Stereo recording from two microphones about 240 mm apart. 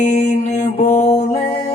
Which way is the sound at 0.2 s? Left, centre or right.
Left.